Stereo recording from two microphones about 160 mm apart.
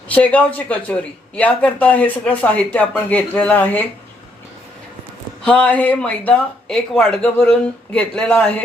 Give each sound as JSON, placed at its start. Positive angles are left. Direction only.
{"t": 0.1, "sound": "speech", "side_deg": 10}
{"t": 5.5, "sound": "speech", "side_deg": 10}